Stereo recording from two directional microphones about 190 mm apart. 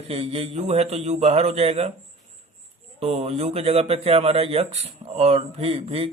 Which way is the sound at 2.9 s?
35° right (ahead or behind).